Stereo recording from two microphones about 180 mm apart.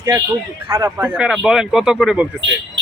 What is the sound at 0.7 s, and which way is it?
A man's voice, 15° right (ahead or behind).